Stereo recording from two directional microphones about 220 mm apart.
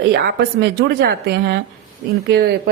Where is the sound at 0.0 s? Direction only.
50° right (ahead or behind).